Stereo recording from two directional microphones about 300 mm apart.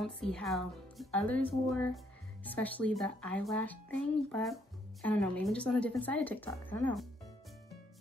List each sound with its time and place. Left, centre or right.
0.0 s speech: centre